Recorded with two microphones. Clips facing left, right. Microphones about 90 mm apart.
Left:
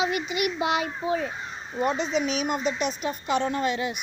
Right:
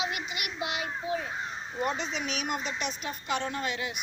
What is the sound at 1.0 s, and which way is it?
Speech, 35° left (ahead or behind).